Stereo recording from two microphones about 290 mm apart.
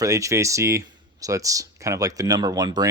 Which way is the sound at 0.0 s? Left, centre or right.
Centre.